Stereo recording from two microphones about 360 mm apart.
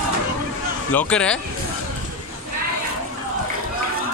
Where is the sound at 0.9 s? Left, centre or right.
Centre.